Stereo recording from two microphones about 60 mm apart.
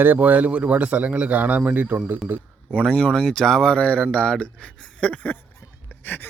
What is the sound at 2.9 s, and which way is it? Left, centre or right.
Speech, centre.